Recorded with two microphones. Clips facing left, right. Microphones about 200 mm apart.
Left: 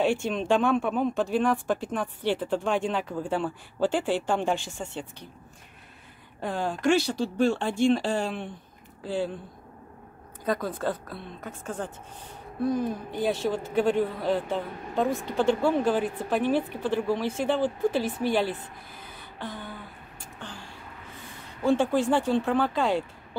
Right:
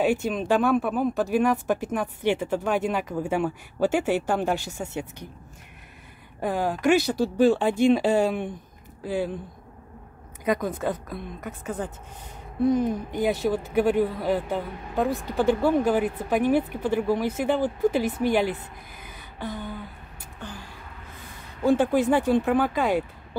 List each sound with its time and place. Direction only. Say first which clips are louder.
0.3 s speech: right 2 dB; 5° right (ahead or behind)
6.4 s speech: right 3 dB; 10° right (ahead or behind)
10.4 s speech: right 3 dB; 15° right (ahead or behind)
12.6 s speech: right 5 dB; 20° right (ahead or behind)
21.6 s speech: right 2 dB; 15° right (ahead or behind)